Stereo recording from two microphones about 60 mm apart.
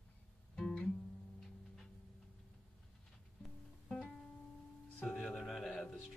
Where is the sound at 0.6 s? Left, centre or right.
Centre.